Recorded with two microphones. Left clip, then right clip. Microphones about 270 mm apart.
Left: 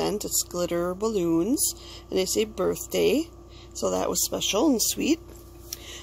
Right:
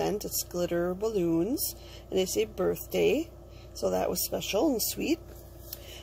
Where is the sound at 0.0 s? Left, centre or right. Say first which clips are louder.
Left 3 dB; left.